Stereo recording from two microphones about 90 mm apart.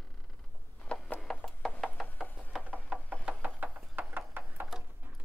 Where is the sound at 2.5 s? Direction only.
10° right (ahead or behind).